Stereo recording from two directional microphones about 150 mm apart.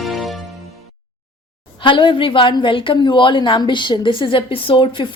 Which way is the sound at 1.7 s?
35° left (ahead or behind).